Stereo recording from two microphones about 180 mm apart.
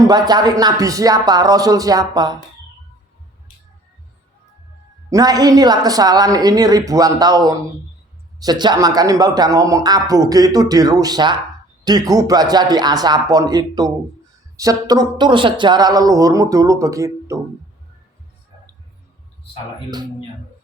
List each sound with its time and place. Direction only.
0.1 s speech: 20° right (ahead or behind)
5.1 s speech: 20° right (ahead or behind)